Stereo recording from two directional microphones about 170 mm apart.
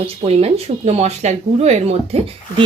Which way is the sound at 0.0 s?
35° right (ahead or behind).